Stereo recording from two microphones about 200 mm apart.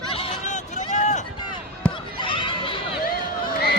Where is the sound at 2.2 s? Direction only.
25° left (ahead or behind).